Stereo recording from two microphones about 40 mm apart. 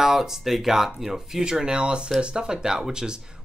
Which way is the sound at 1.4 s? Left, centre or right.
Right.